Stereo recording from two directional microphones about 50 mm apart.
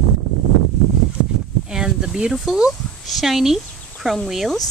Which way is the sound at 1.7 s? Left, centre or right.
Centre.